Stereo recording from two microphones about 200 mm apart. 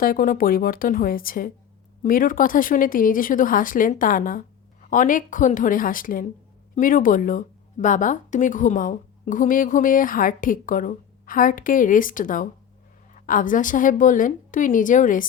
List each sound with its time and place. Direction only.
0.0 s a woman's voice: 45° left (ahead or behind)